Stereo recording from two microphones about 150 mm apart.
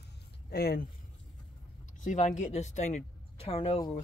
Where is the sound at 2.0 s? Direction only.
50° left (ahead or behind).